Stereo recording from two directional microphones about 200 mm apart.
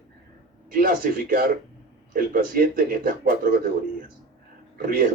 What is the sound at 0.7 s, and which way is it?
A man's voice, 45° right (ahead or behind).